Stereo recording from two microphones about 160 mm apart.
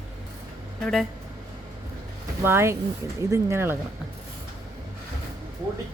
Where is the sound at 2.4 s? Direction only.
15° right (ahead or behind).